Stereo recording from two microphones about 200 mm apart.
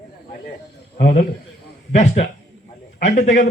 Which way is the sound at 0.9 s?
50° left (ahead or behind).